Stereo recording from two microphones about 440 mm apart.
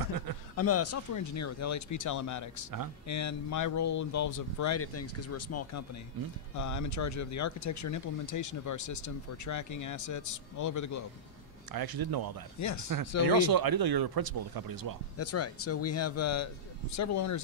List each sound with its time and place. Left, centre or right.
0.6 s speech: left
11.7 s speech: right
12.5 s speech: left
13.4 s speech: right
15.1 s speech: left